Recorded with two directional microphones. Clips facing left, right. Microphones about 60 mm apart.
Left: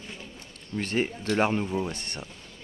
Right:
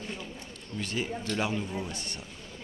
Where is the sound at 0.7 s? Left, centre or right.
Left.